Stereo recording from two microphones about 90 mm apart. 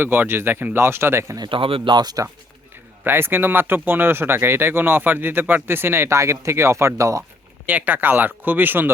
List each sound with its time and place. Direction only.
0.0 s speech: 25° right (ahead or behind)
1.4 s speech: 70° right (ahead or behind); by 2.2 s 50° right (ahead or behind)
3.0 s speech: 25° right (ahead or behind)
7.7 s speech: 20° right (ahead or behind)